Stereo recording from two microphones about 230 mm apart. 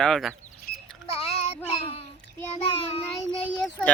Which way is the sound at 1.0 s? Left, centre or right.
Left.